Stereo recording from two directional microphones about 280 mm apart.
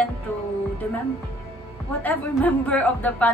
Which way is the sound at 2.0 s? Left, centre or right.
Centre.